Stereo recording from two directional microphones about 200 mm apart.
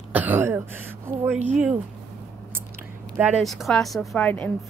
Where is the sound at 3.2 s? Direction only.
5° right (ahead or behind).